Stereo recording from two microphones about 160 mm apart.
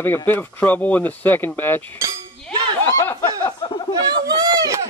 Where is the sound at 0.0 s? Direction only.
15° left (ahead or behind).